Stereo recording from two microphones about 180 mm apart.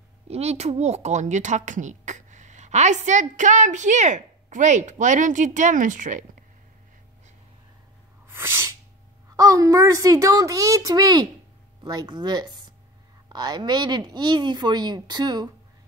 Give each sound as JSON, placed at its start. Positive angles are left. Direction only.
{"t": 0.3, "sound": "speech", "side_deg": -35}
{"t": 8.3, "sound": "sneeze", "side_deg": -15}
{"t": 9.4, "sound": "speech", "side_deg": -20}